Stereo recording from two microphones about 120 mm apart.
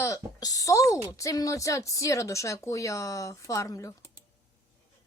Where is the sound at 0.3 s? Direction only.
30° left (ahead or behind).